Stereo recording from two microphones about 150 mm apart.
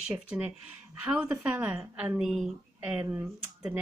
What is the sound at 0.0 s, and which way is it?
A woman's voice, 5° right (ahead or behind).